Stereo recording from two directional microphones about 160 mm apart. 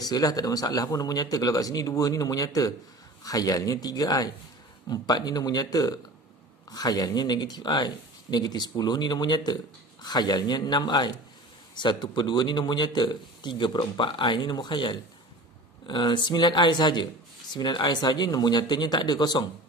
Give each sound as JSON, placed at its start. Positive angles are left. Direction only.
{"t": 0.0, "sound": "a man's voice", "side_deg": 25}